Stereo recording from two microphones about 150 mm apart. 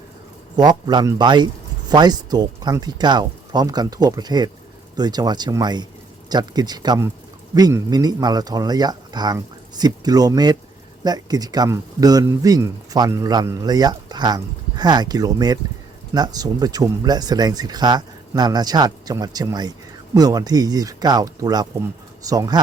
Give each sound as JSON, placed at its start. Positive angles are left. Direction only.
{"t": 0.5, "sound": "speech", "side_deg": -30}